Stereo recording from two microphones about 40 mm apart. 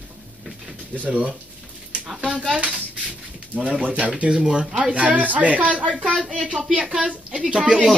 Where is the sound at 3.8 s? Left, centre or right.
Right.